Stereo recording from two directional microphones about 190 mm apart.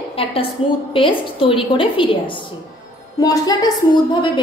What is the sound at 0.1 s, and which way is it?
A woman's voice, 30° left (ahead or behind).